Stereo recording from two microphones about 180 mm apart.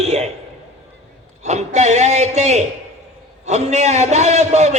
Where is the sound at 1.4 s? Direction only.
40° right (ahead or behind).